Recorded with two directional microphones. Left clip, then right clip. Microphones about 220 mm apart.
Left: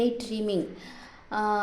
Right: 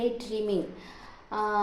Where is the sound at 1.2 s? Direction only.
55° left (ahead or behind).